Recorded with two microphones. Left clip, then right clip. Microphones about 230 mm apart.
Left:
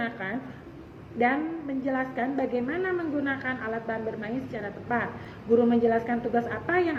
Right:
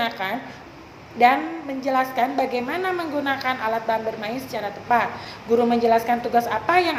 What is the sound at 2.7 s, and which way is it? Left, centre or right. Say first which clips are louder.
A woman's voice: right 4 dB; right.